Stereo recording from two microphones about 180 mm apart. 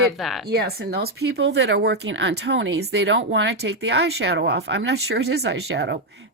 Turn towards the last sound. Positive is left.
turn(degrees=-70)  # may be behind; listen again after turning